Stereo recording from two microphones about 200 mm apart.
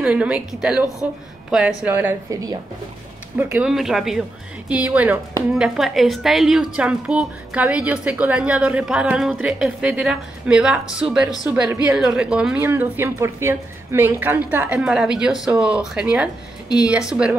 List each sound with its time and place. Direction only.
0.0 s a woman's voice: 5° right (ahead or behind)